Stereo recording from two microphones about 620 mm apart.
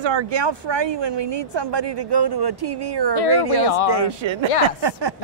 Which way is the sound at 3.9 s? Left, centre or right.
Right.